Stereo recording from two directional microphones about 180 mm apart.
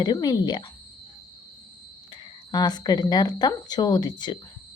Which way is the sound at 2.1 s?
25° left (ahead or behind).